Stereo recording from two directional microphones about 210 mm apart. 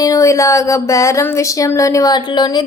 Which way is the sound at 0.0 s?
15° left (ahead or behind).